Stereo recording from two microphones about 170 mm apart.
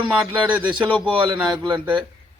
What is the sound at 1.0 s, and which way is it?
Speech, 25° right (ahead or behind).